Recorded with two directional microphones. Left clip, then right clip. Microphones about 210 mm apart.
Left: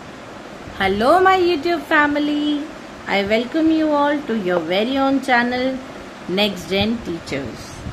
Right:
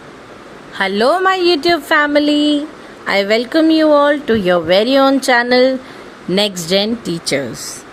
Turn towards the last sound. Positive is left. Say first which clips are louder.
# right 7 dB
turn(degrees=-50)  # may be behind; listen again after turning